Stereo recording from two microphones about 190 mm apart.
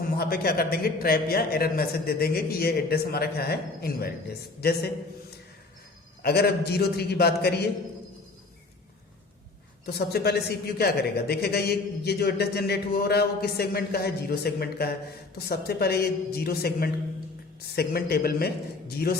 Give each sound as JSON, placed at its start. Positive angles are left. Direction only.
{"t": 0.2, "sound": "speech", "side_deg": 55}
{"t": 6.2, "sound": "speech", "side_deg": 55}
{"t": 9.8, "sound": "speech", "side_deg": 55}